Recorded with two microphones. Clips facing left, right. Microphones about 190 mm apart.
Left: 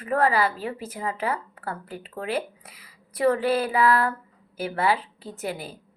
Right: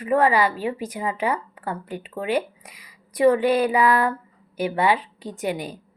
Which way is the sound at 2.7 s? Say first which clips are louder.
Right 6 dB; 15° right (ahead or behind).